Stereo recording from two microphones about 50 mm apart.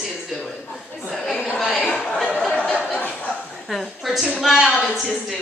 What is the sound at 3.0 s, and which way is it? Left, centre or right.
Chuckle, left.